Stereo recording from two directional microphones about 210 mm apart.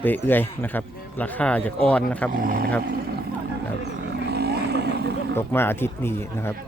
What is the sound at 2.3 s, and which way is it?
Speech, 40° right (ahead or behind).